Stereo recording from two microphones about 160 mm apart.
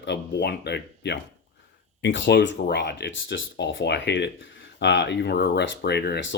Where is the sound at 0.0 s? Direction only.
90° left.